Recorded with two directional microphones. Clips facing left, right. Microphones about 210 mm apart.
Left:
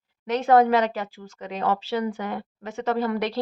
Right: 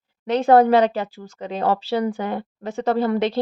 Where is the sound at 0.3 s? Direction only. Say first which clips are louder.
Right 4 dB; 30° right (ahead or behind).